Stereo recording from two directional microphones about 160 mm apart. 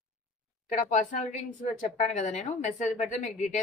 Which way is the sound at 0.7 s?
50° left (ahead or behind).